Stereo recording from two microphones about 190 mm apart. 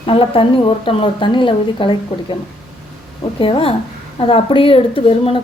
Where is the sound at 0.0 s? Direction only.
30° left (ahead or behind).